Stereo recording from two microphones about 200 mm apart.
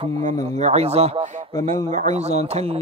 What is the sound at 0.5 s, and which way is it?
A man's voice, 35° right (ahead or behind).